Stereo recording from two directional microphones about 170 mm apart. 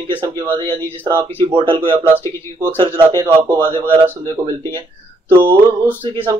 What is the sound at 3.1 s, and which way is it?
Speech, 15° right (ahead or behind).